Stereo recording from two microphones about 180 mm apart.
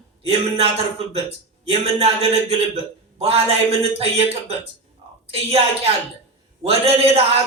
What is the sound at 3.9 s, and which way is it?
Speech, 35° right (ahead or behind).